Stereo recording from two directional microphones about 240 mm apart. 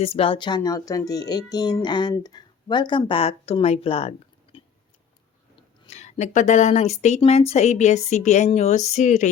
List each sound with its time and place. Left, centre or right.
0.0 s speech: left
5.9 s speech: left